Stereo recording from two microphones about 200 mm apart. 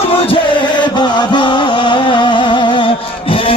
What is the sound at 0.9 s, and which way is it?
Music, 25° left (ahead or behind).